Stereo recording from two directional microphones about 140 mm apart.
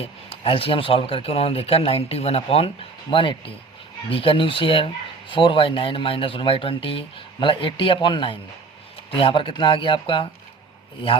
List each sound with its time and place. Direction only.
0.0 s speech: 40° left (ahead or behind)